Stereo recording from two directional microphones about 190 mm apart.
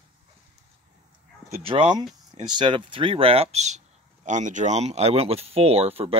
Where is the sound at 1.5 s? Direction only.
30° right (ahead or behind).